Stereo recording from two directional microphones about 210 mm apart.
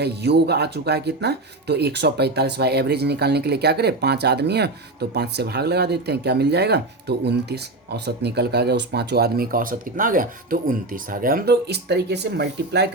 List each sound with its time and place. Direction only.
0.0 s speech: 50° right (ahead or behind)